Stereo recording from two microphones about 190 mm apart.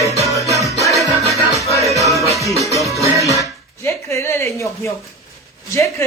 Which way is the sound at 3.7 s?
15° left (ahead or behind).